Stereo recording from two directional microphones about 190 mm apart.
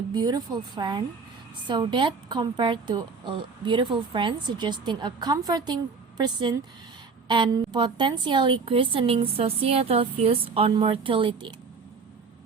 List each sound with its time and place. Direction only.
0.1 s a woman's voice: 20° right (ahead or behind)